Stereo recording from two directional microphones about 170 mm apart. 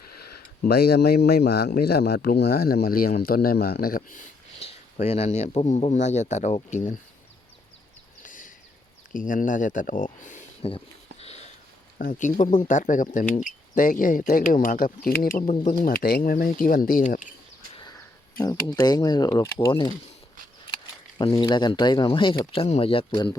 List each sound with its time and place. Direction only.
0.0 s speech: 65° left (ahead or behind)
4.6 s speech: 40° left (ahead or behind)
8.2 s a sound: 50° left (ahead or behind)
9.1 s speech: 50° left (ahead or behind)
10.6 s speech: 35° left (ahead or behind)
11.2 s sniff: 40° left (ahead or behind)
11.9 s speech: 50° left (ahead or behind)
18.3 s speech: 20° left (ahead or behind)
21.2 s speech: 30° left (ahead or behind)